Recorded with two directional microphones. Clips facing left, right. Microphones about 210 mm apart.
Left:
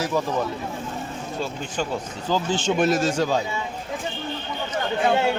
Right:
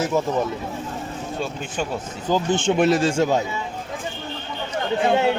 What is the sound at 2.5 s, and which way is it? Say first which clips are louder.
Speech: right 3 dB; 55° right (ahead or behind).